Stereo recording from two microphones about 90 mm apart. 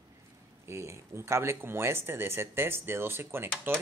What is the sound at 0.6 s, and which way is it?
A man's voice, 30° right (ahead or behind).